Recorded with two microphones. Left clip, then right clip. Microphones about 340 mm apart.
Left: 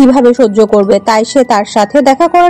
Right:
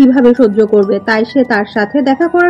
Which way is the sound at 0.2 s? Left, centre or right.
Left.